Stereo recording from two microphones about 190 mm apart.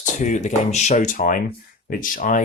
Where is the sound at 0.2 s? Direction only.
40° left (ahead or behind).